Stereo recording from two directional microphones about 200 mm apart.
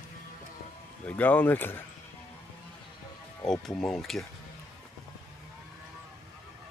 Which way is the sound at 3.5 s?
Centre (ahead or behind).